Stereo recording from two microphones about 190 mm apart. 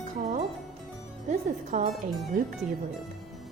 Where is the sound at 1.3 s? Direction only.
35° right (ahead or behind).